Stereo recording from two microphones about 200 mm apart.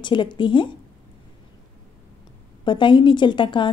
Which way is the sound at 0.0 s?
25° left (ahead or behind).